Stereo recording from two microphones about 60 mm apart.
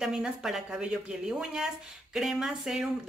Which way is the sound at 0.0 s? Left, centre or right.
Centre.